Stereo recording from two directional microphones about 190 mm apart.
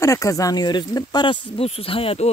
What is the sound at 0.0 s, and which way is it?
Speech, 15° left (ahead or behind).